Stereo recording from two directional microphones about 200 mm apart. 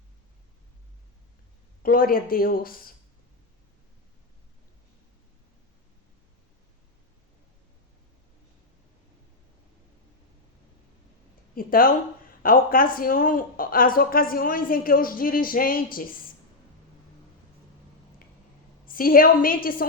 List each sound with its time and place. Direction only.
1.8 s speech: 45° left (ahead or behind)
11.5 s speech: 45° left (ahead or behind)
18.9 s speech: 45° left (ahead or behind)